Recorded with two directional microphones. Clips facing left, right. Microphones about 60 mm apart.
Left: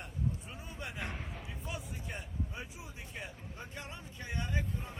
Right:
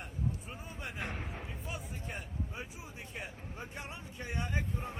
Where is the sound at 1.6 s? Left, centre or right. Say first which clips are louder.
Left 3 dB; centre.